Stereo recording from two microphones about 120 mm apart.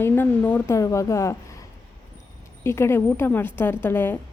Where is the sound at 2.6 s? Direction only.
20° left (ahead or behind).